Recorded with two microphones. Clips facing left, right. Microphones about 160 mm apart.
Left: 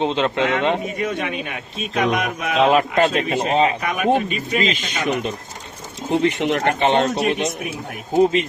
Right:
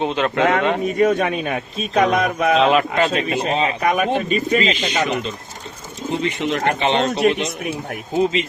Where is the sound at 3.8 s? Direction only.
45° right (ahead or behind).